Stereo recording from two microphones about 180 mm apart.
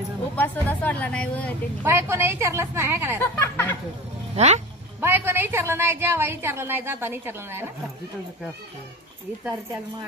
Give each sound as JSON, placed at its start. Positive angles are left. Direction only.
{"t": 0.4, "sound": "speech", "side_deg": 10}
{"t": 1.8, "sound": "a woman's voice", "side_deg": -15}
{"t": 3.2, "sound": "speech", "side_deg": 15}
{"t": 4.4, "sound": "speech", "side_deg": -40}
{"t": 5.0, "sound": "a woman's voice", "side_deg": -10}